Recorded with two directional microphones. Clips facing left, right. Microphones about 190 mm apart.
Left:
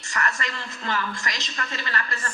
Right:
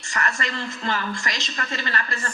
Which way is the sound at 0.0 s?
30° right (ahead or behind).